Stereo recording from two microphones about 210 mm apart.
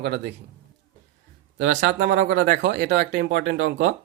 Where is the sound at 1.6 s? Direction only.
60° right (ahead or behind).